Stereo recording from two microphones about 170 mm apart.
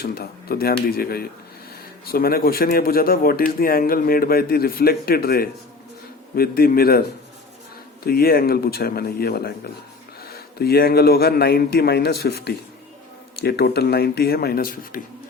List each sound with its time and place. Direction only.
0.0 s a man's voice: 65° left (ahead or behind)
8.0 s a man's voice: 60° left (ahead or behind)